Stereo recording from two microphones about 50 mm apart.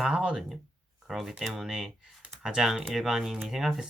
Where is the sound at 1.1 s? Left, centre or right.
Centre.